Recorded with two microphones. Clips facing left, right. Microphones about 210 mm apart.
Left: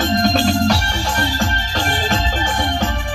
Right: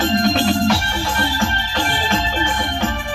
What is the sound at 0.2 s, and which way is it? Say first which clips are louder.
Music: left 1 dB; 40° left (ahead or behind).